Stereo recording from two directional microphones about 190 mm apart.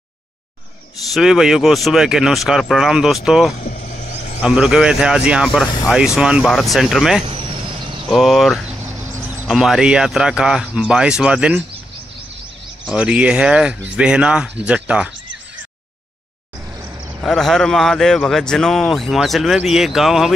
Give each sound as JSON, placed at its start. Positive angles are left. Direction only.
{"t": 1.1, "sound": "speech", "side_deg": 0}
{"t": 3.6, "sound": "vehicle", "side_deg": 45}
{"t": 4.4, "sound": "speech", "side_deg": -5}
{"t": 7.2, "sound": "vehicle", "side_deg": -25}
{"t": 8.1, "sound": "speech", "side_deg": 0}
{"t": 9.0, "sound": "a sound", "side_deg": -15}
{"t": 9.5, "sound": "speech", "side_deg": 0}
{"t": 12.8, "sound": "speech", "side_deg": -5}
{"t": 17.2, "sound": "speech", "side_deg": 0}